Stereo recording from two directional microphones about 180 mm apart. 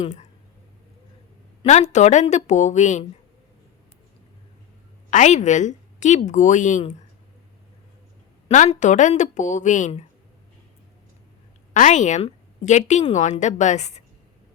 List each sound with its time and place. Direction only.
1.6 s a woman's voice: 40° left (ahead or behind)
5.1 s a woman's voice: 40° left (ahead or behind)
8.4 s a woman's voice: 40° left (ahead or behind)
11.7 s a woman's voice: 40° left (ahead or behind)